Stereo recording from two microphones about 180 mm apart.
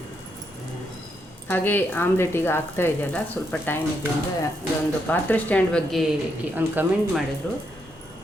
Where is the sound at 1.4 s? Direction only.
10° left (ahead or behind).